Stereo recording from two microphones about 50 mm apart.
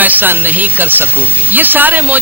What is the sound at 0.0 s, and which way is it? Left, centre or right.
Speech, right.